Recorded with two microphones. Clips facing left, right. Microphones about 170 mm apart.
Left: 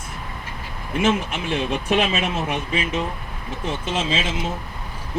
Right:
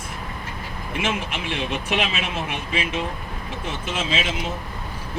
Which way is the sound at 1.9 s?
40° left (ahead or behind).